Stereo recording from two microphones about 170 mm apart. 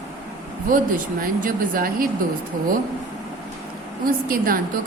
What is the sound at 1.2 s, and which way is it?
Speech, 55° right (ahead or behind).